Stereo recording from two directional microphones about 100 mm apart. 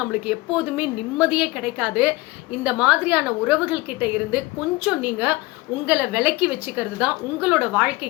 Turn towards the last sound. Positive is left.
turn(degrees=-15)  # may be behind; listen again after turning